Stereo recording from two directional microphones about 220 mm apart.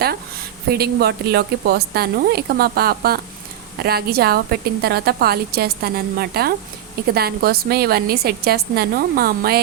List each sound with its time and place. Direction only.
0.0 s speech: 45° right (ahead or behind)